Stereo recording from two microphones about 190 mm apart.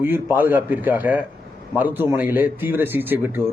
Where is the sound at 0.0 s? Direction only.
10° right (ahead or behind).